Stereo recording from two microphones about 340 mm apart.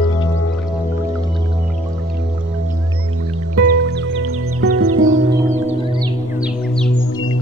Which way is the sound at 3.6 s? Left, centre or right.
Right.